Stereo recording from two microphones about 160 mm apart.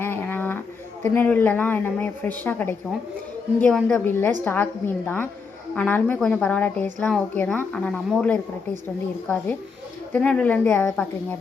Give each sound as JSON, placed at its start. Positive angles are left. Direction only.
{"t": 0.0, "sound": "a sound", "side_deg": 10}
{"t": 1.1, "sound": "a woman's voice", "side_deg": 10}
{"t": 10.1, "sound": "a woman's voice", "side_deg": 5}